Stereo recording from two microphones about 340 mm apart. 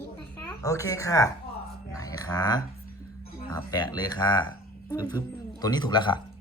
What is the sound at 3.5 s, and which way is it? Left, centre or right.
Speech, centre.